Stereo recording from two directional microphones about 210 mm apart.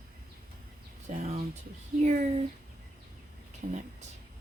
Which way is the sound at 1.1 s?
35° right (ahead or behind).